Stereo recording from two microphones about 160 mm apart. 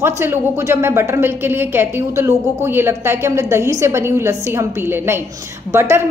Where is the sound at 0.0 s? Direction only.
15° right (ahead or behind).